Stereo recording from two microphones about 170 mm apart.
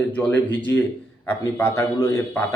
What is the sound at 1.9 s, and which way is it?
Speech, 15° left (ahead or behind).